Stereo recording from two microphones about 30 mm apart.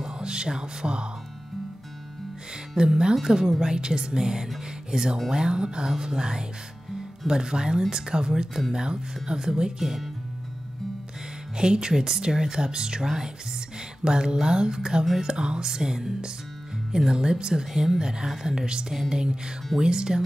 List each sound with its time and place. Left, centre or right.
0.0 s music: right
2.8 s speech: right
11.5 s speech: right